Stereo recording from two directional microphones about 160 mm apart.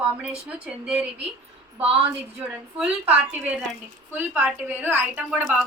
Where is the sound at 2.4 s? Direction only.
10° right (ahead or behind).